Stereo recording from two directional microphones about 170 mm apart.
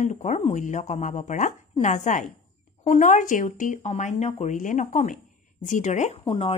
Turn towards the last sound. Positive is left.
turn(degrees=35)  # may be behind; listen again after turning